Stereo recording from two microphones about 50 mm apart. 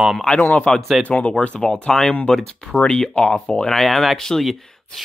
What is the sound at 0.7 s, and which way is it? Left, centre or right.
Speech, centre.